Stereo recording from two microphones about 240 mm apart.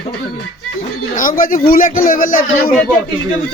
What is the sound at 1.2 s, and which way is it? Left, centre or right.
Speech, left.